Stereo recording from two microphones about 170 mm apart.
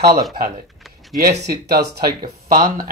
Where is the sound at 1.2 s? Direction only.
65° right (ahead or behind).